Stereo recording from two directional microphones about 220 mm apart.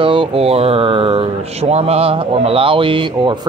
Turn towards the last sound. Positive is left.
turn(degrees=-20)  # may be behind; listen again after turning